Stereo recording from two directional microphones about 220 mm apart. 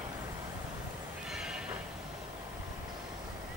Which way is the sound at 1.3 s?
Centre (ahead or behind).